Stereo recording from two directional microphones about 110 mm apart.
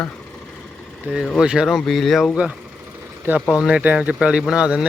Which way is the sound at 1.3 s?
5° right (ahead or behind).